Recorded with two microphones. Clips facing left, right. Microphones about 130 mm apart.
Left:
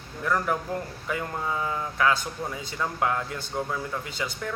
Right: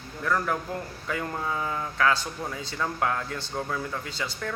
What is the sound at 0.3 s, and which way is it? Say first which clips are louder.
A man's voice: left 1 dB; 15° left (ahead or behind).